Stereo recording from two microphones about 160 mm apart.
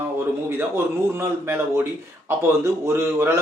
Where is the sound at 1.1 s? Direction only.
15° right (ahead or behind).